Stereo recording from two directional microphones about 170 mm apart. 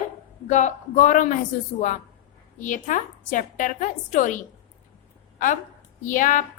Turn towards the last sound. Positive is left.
turn(degrees=50)  # may be behind; listen again after turning